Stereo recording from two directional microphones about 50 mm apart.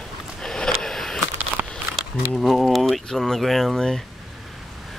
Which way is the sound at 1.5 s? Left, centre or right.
Left.